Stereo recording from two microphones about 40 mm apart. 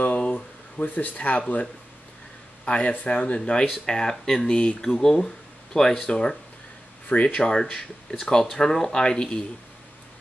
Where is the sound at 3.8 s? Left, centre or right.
Centre.